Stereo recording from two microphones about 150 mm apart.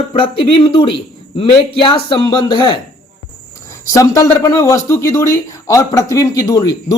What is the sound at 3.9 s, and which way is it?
A man's voice, 20° left (ahead or behind).